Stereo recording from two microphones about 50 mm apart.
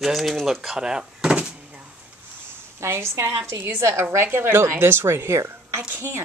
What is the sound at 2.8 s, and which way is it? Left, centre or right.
A woman's voice, right.